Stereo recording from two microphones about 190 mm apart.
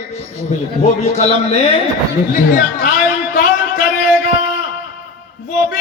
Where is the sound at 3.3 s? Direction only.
50° left (ahead or behind).